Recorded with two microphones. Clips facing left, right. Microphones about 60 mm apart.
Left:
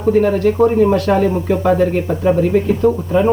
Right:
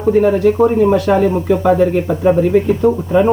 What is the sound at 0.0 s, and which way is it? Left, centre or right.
Speech, centre.